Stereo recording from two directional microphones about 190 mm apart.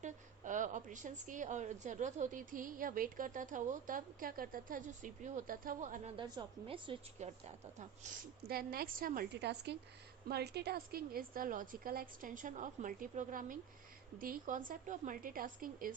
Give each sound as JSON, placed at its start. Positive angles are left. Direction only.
{"t": 0.0, "sound": "a woman's voice", "side_deg": -40}
{"t": 6.1, "sound": "a woman's voice", "side_deg": -25}
{"t": 8.4, "sound": "a woman's voice", "side_deg": -50}